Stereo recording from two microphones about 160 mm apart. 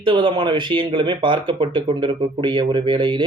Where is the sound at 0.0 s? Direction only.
30° right (ahead or behind).